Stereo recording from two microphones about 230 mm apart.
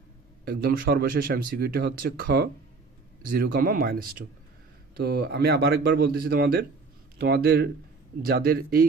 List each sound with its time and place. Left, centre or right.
0.5 s speech: right